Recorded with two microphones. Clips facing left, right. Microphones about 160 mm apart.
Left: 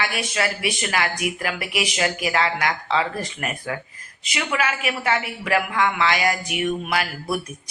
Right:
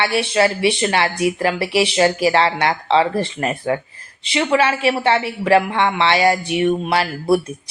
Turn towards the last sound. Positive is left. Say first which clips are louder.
# right 8 dB
turn(degrees=-30)  # may be behind; listen again after turning